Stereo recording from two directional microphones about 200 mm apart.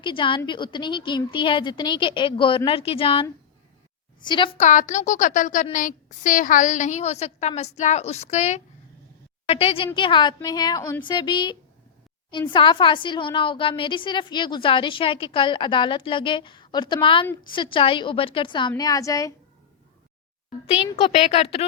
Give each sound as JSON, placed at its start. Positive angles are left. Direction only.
{"t": 0.0, "sound": "a woman's voice", "side_deg": 25}
{"t": 20.7, "sound": "speech", "side_deg": 30}